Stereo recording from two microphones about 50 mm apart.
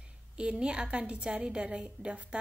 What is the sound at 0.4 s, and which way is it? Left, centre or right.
A woman's voice, centre.